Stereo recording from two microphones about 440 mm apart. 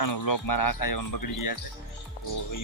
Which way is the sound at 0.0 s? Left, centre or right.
Left.